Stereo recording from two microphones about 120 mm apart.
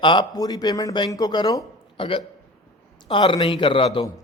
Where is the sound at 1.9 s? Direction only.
45° left (ahead or behind).